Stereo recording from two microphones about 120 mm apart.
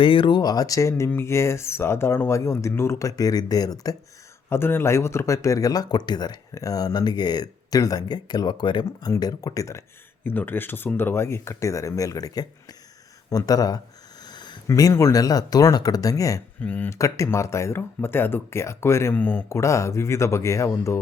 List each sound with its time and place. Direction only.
0.0 s speech: 45° left (ahead or behind)
4.4 s speech: 20° left (ahead or behind)
13.3 s a sound: 30° left (ahead or behind)
14.7 s speech: 25° left (ahead or behind)
16.6 s speech: 15° left (ahead or behind)
16.9 s speech: 25° left (ahead or behind)